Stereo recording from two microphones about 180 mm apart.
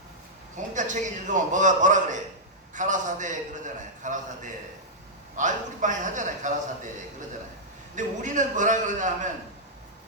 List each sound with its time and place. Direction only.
0.5 s a man's voice: 45° right (ahead or behind)
7.9 s a man's voice: 45° right (ahead or behind)